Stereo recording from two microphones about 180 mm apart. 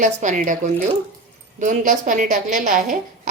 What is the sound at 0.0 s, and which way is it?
Speech, 45° right (ahead or behind).